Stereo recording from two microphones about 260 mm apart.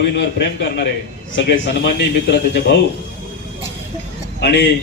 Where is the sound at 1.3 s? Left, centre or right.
Left.